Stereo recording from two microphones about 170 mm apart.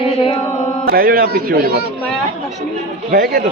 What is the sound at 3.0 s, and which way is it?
Speech, 60° right (ahead or behind).